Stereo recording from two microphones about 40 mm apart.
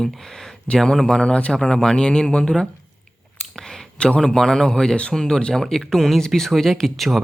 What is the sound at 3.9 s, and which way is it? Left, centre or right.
Speech, left.